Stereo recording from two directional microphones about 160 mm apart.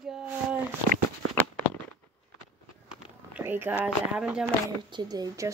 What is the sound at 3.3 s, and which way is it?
Speech, 15° right (ahead or behind).